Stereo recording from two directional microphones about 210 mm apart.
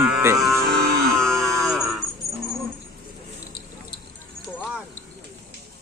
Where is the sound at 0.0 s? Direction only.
10° right (ahead or behind).